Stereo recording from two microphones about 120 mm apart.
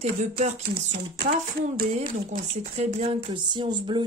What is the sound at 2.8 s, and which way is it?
Speech, 70° right (ahead or behind).